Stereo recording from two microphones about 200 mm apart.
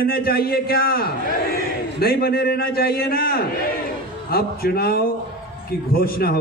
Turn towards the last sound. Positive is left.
turn(degrees=50)  # may be behind; listen again after turning